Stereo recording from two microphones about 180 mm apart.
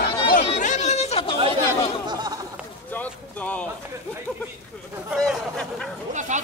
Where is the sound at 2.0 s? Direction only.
20° right (ahead or behind).